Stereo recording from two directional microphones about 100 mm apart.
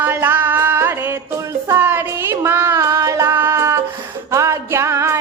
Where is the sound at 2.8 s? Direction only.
35° right (ahead or behind).